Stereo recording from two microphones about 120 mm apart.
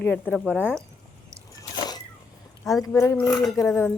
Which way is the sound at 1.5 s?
35° left (ahead or behind).